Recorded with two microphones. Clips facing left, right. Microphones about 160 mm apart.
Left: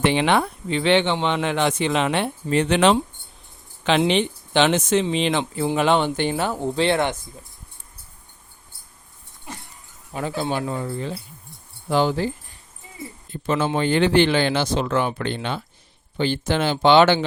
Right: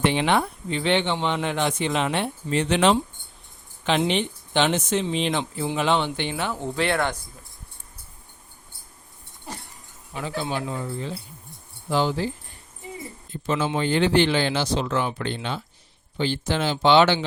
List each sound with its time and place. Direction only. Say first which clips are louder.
0.0 s speech: left 2 dB; 80° left
3.8 s speech: left 4 dB; 90° left
5.6 s speech: left 4 dB; 55° left (ahead or behind); by 7.2 s 25° left (ahead or behind)
10.1 s speech: left 3 dB; 45° left (ahead or behind)
13.3 s speech: left 3 dB; 55° left (ahead or behind)